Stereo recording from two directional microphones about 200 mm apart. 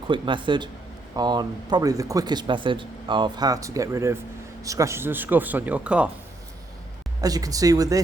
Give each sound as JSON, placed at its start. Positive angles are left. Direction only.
{"t": 0.1, "sound": "speech", "side_deg": -25}
{"t": 7.2, "sound": "speech", "side_deg": -20}